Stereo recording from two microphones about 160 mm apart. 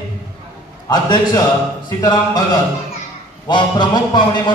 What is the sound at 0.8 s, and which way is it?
A man's voice, 25° left (ahead or behind).